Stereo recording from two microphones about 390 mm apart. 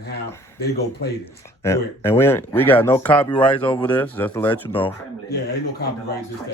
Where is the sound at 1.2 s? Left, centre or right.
Centre.